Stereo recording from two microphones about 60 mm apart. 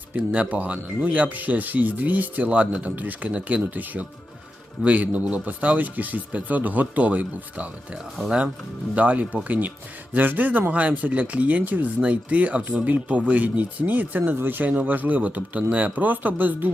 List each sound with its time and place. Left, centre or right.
0.2 s speech: right
9.0 s speech: right